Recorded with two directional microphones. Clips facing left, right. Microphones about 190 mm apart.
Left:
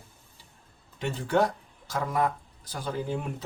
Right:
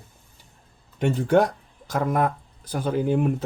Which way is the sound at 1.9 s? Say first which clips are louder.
Right 5 dB; 55° right (ahead or behind).